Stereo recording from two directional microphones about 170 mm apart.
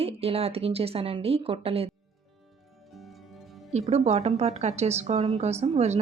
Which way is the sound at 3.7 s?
40° right (ahead or behind).